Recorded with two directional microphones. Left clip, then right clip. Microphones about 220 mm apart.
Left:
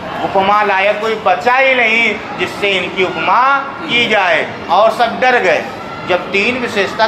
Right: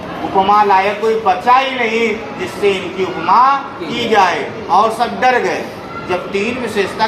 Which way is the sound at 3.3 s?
15° left (ahead or behind).